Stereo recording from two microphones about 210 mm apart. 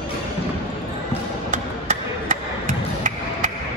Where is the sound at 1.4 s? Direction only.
40° right (ahead or behind).